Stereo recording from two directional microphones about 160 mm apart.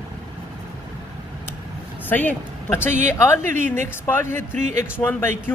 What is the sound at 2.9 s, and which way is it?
Speech, 50° right (ahead or behind).